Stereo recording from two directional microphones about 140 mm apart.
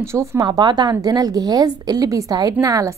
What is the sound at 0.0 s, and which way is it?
Speech, 20° right (ahead or behind).